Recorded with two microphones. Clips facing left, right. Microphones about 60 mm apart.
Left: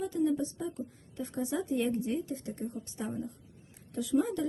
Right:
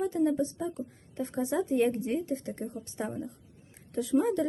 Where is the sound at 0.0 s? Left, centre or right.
Right.